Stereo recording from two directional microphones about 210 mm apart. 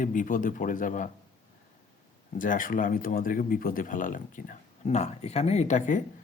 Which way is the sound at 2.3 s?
40° left (ahead or behind).